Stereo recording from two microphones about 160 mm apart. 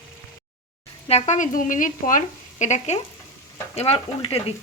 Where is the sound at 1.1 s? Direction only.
45° left (ahead or behind).